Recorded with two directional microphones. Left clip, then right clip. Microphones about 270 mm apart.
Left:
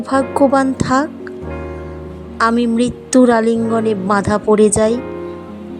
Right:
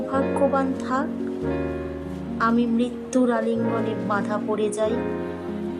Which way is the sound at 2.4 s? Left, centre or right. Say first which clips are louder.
Left 8 dB; left.